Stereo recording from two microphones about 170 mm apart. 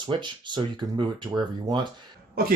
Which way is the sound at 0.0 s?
25° right (ahead or behind).